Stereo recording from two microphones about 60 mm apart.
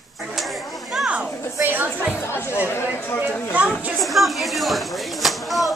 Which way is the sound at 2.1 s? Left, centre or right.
Left.